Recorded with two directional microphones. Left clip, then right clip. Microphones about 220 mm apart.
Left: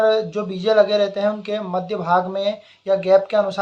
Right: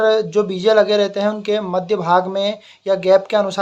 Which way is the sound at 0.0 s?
45° right (ahead or behind).